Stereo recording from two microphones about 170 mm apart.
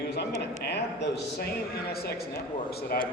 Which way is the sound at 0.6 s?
85° left.